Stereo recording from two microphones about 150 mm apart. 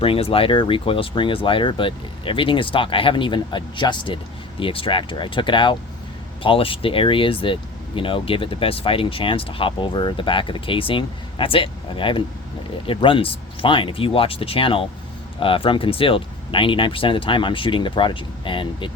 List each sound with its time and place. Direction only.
0.0 s speech: 40° left (ahead or behind)